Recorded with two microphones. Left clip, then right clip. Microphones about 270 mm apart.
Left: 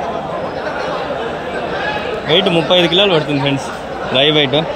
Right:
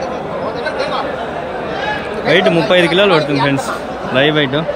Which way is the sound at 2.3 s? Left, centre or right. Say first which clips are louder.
Right 1 dB; right.